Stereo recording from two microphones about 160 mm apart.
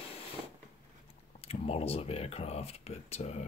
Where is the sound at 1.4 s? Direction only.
40° left (ahead or behind).